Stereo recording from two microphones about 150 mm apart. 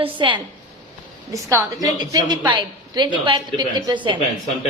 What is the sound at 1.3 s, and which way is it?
A woman's voice, 20° right (ahead or behind).